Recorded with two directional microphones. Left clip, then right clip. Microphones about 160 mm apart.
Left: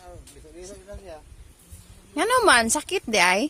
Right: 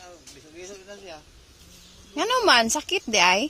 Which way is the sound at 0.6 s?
90° left.